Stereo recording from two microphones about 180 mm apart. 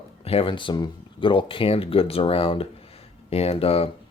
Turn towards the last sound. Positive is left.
turn(degrees=35)  # may be behind; listen again after turning